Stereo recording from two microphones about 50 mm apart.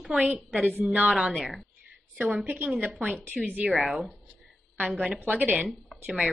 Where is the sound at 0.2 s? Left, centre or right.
Right.